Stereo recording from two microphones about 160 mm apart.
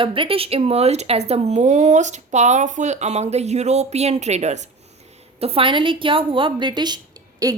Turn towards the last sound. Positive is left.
turn(degrees=-20)  # may be behind; listen again after turning